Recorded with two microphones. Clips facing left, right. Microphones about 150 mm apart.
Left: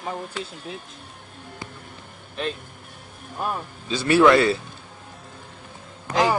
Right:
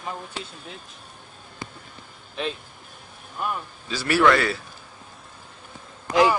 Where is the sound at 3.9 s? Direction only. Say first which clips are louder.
Left 4 dB; 20° left (ahead or behind).